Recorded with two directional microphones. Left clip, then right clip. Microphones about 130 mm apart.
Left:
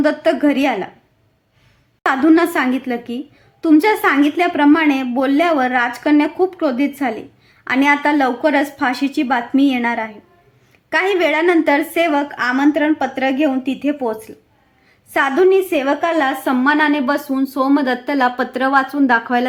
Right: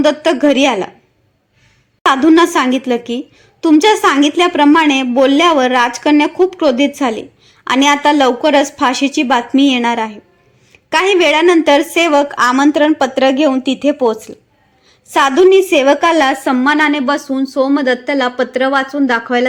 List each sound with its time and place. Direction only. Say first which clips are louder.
0.0 s a woman's voice: right 4 dB; 15° right (ahead or behind)
2.0 s a woman's voice: right 4 dB; 15° right (ahead or behind)